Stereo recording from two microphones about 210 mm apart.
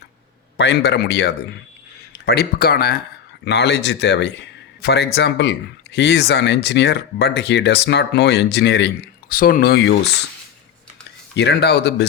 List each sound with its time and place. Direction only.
0.5 s a man's voice: 55° left (ahead or behind)
9.3 s speech: 45° left (ahead or behind)
11.3 s speech: 50° left (ahead or behind)